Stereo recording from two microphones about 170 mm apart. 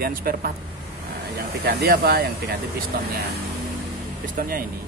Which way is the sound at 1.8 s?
65° right (ahead or behind).